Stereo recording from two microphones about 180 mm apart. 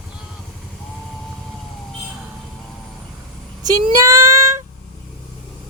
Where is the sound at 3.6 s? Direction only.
20° right (ahead or behind).